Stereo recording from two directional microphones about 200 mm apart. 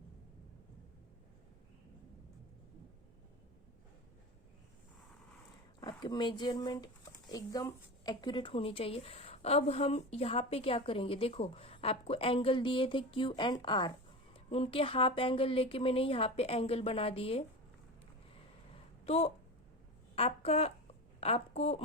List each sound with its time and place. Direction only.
5.8 s a woman's voice: 20° left (ahead or behind)
19.0 s a woman's voice: 30° left (ahead or behind)